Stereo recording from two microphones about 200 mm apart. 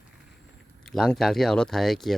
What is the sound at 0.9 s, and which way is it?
Speech, centre (ahead or behind).